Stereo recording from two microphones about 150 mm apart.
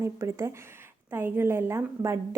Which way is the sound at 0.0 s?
20° right (ahead or behind).